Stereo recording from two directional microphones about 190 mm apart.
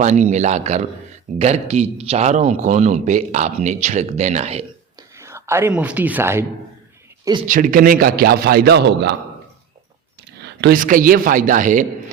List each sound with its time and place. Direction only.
0.0 s speech: 40° right (ahead or behind)
5.1 s speech: 15° right (ahead or behind)
7.4 s a man's voice: 45° right (ahead or behind)
10.4 s a man's voice: 55° right (ahead or behind)